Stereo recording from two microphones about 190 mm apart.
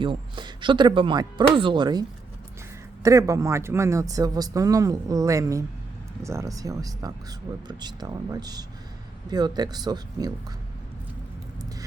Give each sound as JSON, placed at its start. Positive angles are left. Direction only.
{"t": 0.0, "sound": "speech", "side_deg": -25}